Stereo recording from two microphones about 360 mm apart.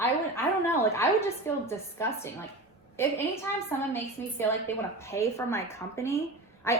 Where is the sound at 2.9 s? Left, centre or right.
Centre.